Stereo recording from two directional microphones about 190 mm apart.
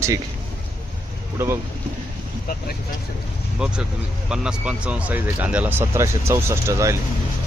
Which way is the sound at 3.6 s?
5° right (ahead or behind).